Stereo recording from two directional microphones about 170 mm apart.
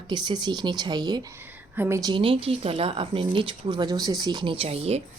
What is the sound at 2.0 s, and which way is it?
Speech, 30° right (ahead or behind).